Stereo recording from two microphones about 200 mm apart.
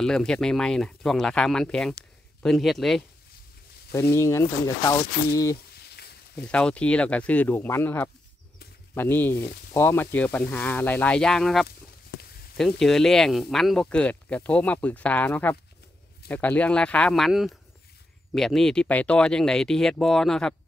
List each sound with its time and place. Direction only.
0.0 s speech: 5° left (ahead or behind)
3.9 s speech: 15° left (ahead or behind)
5.8 s a sound: 55° left (ahead or behind)
6.3 s speech: 5° left (ahead or behind)